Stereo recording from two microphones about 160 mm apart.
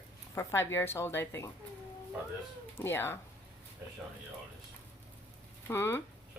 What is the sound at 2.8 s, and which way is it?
Speech, 15° left (ahead or behind).